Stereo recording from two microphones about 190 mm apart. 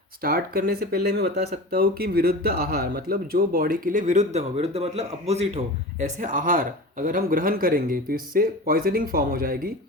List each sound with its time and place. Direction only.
0.2 s speech: 50° right (ahead or behind)